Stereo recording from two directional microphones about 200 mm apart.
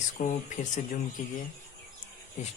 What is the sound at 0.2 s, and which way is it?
Speech, 40° left (ahead or behind).